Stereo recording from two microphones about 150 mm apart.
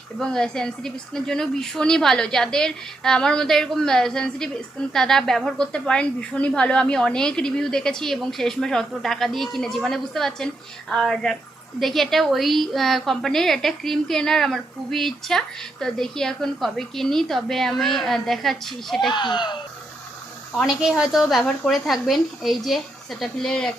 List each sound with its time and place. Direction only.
0.2 s a woman's voice: 5° left (ahead or behind)
19.1 s speech: 30° left (ahead or behind)
20.6 s a woman's voice: centre (ahead or behind)